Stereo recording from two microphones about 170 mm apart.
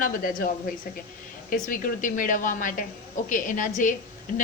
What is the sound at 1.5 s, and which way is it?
A woman's voice, 55° left (ahead or behind).